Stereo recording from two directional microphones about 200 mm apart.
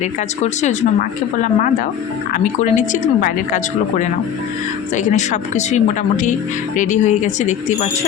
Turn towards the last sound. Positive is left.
turn(degrees=35)  # may be behind; listen again after turning